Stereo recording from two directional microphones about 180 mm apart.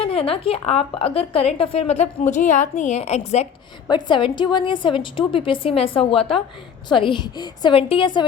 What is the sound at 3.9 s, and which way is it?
A woman's voice, 25° left (ahead or behind).